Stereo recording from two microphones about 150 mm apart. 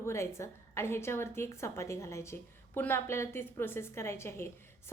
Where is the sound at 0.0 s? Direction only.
20° left (ahead or behind).